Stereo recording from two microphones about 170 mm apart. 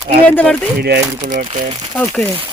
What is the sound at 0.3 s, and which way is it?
Speech, 10° left (ahead or behind).